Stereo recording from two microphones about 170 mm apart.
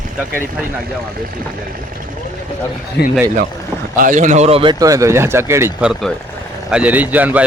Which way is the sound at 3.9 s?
50° right (ahead or behind).